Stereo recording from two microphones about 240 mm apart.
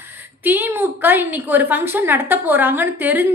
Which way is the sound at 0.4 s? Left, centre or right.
Centre.